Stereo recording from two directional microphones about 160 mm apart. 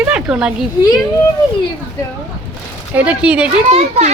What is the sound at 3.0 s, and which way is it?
Speech, 5° right (ahead or behind).